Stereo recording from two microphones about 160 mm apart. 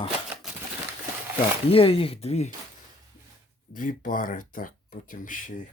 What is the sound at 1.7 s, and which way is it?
Speech, 35° left (ahead or behind).